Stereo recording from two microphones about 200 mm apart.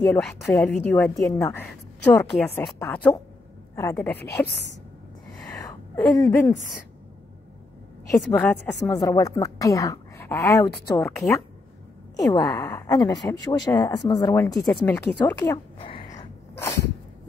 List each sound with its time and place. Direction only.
0.0 s a woman's voice: 10° left (ahead or behind)
2.3 s a woman's voice: centre (ahead or behind)
5.6 s a sound: 20° left (ahead or behind)
8.2 s a woman's voice: 5° left (ahead or behind)
16.0 s a sound: 40° left (ahead or behind)
16.5 s sneeze: 15° left (ahead or behind)